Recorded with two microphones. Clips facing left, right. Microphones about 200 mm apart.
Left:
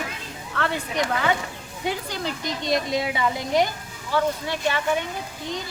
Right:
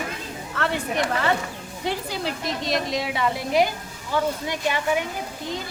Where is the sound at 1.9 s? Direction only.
5° right (ahead or behind).